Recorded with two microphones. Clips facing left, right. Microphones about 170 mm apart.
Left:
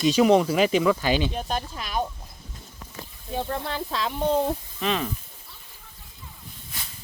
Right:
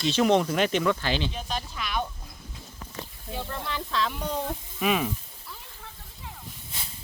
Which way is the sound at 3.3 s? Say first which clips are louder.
Left 5 dB; 40° left (ahead or behind).